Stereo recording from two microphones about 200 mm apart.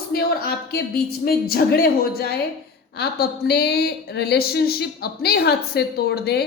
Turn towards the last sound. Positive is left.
turn(degrees=55)  # may be behind; listen again after turning